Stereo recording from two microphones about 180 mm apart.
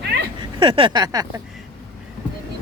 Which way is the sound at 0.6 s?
25° right (ahead or behind).